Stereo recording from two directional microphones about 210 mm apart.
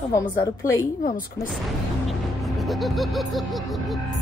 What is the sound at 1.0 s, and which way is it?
Speech, 40° left (ahead or behind).